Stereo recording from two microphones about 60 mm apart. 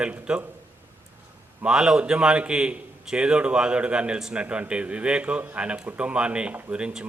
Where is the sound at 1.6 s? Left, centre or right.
Centre.